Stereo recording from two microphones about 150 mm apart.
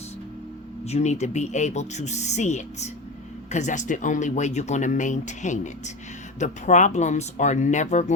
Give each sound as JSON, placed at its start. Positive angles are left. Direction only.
{"t": 0.9, "sound": "speech", "side_deg": 50}